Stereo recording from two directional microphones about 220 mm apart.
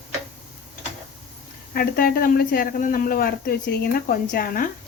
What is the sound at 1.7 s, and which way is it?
Speech, 45° left (ahead or behind).